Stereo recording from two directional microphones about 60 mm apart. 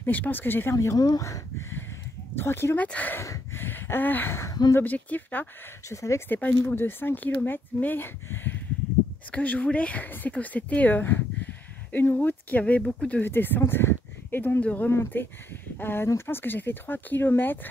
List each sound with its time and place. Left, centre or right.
0.0 s speech: left
0.7 s speech: left
2.3 s speech: left
2.8 s speech: left
3.5 s a sound: left
4.7 s speech: left
5.9 s speech: left
6.2 s speech: left
9.3 s speech: left
13.2 s speech: left
14.6 s speech: left
14.9 s speech: left